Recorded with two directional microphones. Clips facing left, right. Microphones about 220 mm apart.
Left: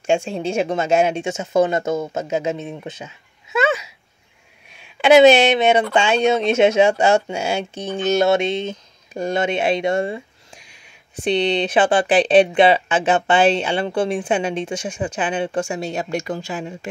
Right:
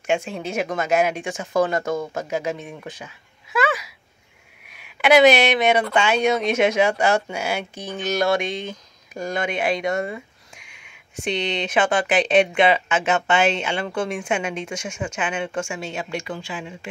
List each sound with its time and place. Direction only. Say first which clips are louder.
0.0 s speech: left 4 dB; 30° left (ahead or behind)